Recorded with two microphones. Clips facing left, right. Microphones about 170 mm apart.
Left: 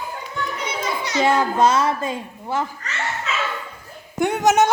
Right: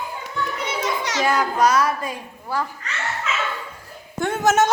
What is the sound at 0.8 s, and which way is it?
Children playing, 90° right.